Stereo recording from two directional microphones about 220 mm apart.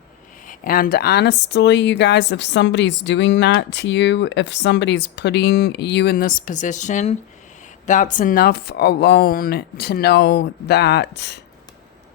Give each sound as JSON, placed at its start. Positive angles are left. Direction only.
{"t": 0.4, "sound": "speech", "side_deg": 40}